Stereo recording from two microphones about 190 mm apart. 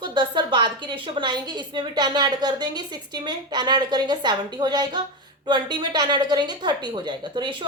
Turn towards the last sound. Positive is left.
turn(degrees=-25)  # may be behind; listen again after turning